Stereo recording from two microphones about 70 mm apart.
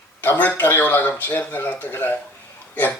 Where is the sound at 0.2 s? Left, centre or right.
Left.